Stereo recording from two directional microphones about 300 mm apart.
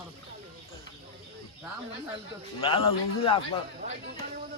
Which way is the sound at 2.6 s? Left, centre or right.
Centre.